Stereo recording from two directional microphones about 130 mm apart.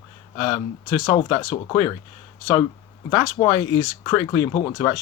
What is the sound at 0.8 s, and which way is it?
Speech, 25° left (ahead or behind).